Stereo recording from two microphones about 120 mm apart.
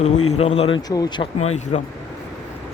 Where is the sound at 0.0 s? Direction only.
55° left (ahead or behind).